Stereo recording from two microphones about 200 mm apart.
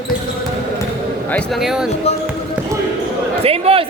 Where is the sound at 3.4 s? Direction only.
30° right (ahead or behind).